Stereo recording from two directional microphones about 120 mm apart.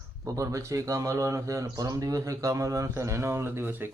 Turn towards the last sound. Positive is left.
turn(degrees=-20)  # may be behind; listen again after turning